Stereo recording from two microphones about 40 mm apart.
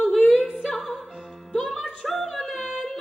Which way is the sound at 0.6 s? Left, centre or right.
Centre.